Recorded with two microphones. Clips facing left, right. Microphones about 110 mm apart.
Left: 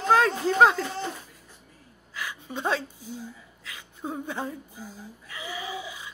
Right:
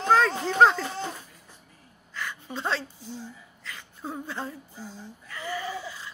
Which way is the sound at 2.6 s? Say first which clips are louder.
Left 3 dB; 15° left (ahead or behind).